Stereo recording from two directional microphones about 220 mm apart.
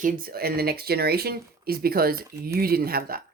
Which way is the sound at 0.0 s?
40° right (ahead or behind).